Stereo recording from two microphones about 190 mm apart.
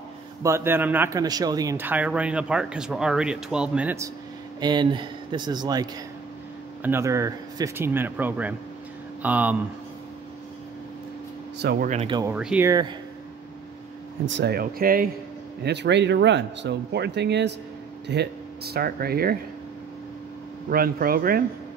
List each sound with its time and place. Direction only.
0.4 s speech: 15° right (ahead or behind)
4.6 s speech: 25° right (ahead or behind)
11.9 s speech: 30° right (ahead or behind)
12.4 s speech: 5° right (ahead or behind)
12.6 s speech: 20° right (ahead or behind)
14.2 s speech: 65° right (ahead or behind); by 15.0 s 50° right (ahead or behind)
15.6 s speech: 65° right (ahead or behind)
20.7 s speech: 50° right (ahead or behind)